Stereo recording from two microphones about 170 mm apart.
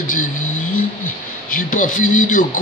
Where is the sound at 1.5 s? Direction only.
55° left (ahead or behind).